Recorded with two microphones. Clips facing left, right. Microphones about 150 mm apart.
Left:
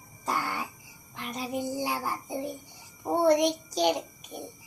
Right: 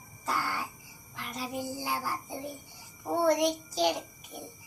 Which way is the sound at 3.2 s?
20° left (ahead or behind).